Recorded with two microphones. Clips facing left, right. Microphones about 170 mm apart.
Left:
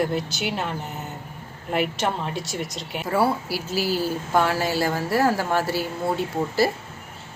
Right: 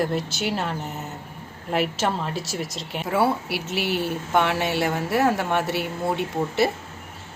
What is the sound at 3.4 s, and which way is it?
Speech, 60° right (ahead or behind).